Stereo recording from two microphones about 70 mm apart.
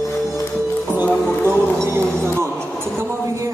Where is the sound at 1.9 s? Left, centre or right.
Right.